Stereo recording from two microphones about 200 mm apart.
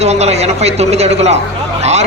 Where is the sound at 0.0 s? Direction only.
35° right (ahead or behind).